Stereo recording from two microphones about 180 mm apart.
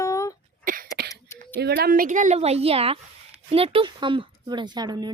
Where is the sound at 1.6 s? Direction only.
60° right (ahead or behind).